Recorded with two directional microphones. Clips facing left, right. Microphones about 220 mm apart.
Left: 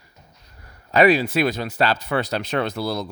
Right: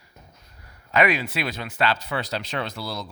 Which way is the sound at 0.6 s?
35° left (ahead or behind).